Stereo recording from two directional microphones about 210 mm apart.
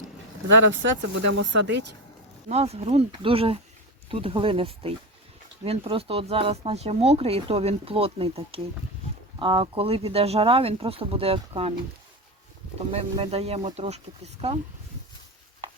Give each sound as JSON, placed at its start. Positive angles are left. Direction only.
{"t": 0.5, "sound": "speech", "side_deg": -60}
{"t": 2.5, "sound": "speech", "side_deg": -30}
{"t": 12.9, "sound": "speech", "side_deg": -30}